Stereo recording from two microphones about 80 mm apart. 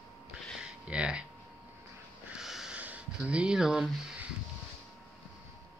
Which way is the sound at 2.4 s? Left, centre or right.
Centre.